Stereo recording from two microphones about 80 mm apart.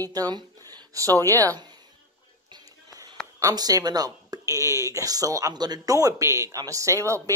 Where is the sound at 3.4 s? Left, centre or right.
Right.